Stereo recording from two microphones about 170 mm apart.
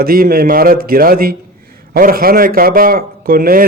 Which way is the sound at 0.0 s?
60° right (ahead or behind).